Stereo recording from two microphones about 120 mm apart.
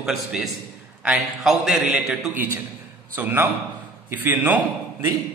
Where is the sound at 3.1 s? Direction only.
15° right (ahead or behind).